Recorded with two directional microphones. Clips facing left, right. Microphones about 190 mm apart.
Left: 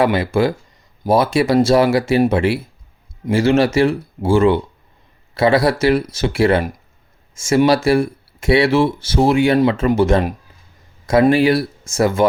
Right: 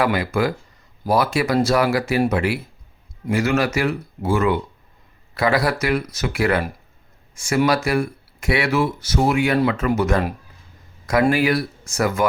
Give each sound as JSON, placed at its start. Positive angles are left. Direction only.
{"t": 0.0, "sound": "speech", "side_deg": 25}